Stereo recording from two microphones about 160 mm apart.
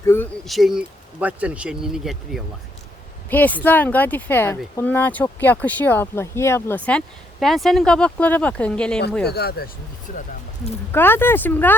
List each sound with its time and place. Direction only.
0.0 s a sound: 15° left (ahead or behind)
0.4 s speech: centre (ahead or behind)
3.2 s speech: 10° left (ahead or behind)
9.2 s speech: 85° left
10.9 s speech: 15° left (ahead or behind)